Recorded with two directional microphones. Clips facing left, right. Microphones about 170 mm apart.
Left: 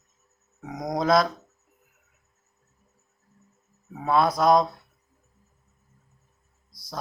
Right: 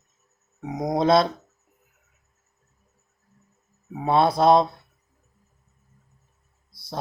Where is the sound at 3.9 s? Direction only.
25° right (ahead or behind).